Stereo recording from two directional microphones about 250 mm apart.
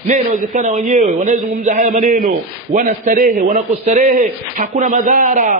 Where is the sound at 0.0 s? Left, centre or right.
Right.